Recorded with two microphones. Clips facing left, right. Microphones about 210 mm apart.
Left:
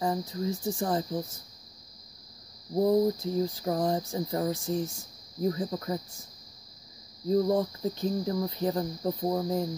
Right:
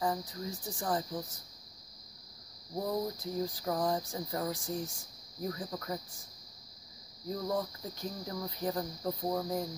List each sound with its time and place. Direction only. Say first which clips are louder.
0.0 s cricket: left 5 dB; 25° left (ahead or behind)
2.7 s cricket: left 11 dB; 30° left (ahead or behind)
7.2 s cricket: left 9 dB; 25° left (ahead or behind)